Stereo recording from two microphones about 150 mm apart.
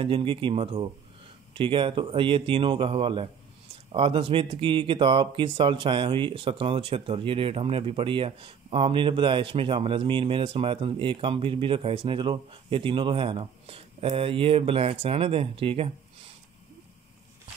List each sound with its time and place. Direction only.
0.0 s speech: 35° right (ahead or behind)